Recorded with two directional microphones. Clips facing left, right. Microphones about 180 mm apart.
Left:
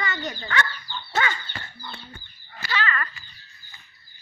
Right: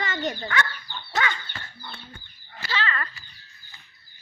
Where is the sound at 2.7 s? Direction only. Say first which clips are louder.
Left 1 dB; 25° right (ahead or behind).